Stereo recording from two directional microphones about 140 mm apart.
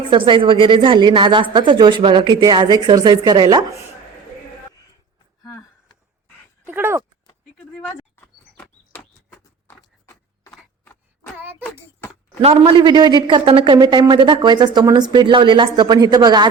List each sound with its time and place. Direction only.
0.1 s a man's voice: 35° right (ahead or behind)
6.7 s speech: 15° right (ahead or behind)
8.1 s a sound: 15° left (ahead or behind)
9.4 s horse: 20° left (ahead or behind)
11.9 s a sound: 15° left (ahead or behind)
12.4 s a man's voice: 45° right (ahead or behind)